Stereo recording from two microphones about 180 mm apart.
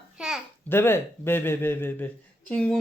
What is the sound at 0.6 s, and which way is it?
Speech, 15° left (ahead or behind).